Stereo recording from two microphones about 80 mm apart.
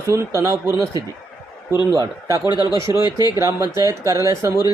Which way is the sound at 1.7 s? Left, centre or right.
Right.